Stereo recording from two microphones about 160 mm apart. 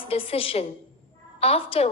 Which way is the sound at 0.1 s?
35° left (ahead or behind).